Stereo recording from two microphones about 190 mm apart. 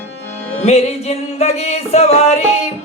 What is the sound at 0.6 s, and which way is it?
Music, 35° left (ahead or behind).